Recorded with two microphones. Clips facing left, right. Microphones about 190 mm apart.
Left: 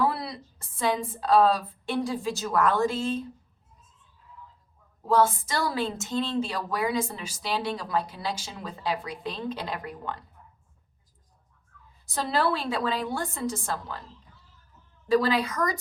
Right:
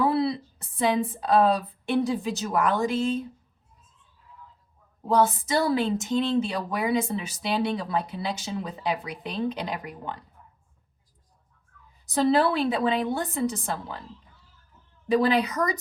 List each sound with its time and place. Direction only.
0.0 s a woman's voice: 20° right (ahead or behind)
5.0 s a woman's voice: 20° right (ahead or behind)
12.1 s a woman's voice: 20° right (ahead or behind)
15.0 s a woman's voice: 20° right (ahead or behind)